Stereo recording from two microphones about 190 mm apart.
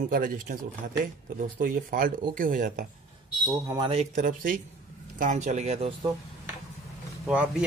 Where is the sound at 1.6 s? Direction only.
45° right (ahead or behind).